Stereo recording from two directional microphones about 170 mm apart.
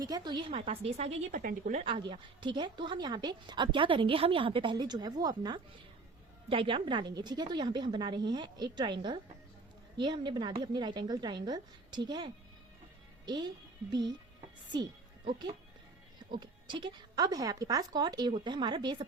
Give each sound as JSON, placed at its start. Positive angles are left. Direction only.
{"t": 0.0, "sound": "a woman's voice", "side_deg": -25}
{"t": 1.4, "sound": "speech", "side_deg": -60}
{"t": 1.7, "sound": "speech", "side_deg": -30}
{"t": 15.3, "sound": "speech", "side_deg": -25}